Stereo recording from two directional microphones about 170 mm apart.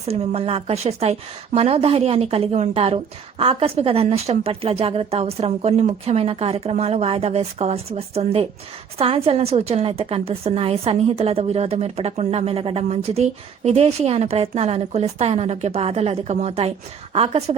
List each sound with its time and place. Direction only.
0.0 s a woman's voice: 35° right (ahead or behind)